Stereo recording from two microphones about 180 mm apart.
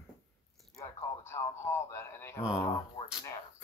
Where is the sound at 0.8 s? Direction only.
15° left (ahead or behind).